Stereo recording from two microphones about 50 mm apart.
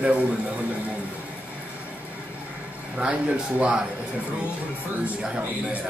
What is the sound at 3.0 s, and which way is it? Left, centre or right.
Speech, right.